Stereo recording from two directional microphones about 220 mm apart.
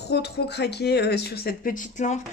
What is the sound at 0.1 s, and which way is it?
Speech, 50° left (ahead or behind).